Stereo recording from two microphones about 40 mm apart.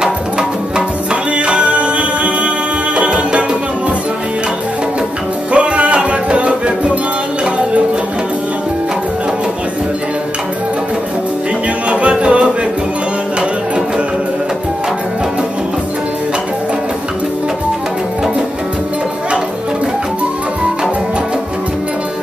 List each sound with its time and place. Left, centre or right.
0.0 s music: centre
5.5 s music: right
11.9 s music: right